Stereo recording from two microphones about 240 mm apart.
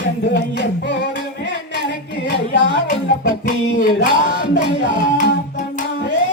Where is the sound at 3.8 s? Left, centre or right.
Left.